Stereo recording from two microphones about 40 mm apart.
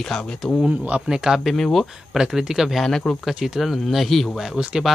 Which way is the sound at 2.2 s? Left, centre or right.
Centre.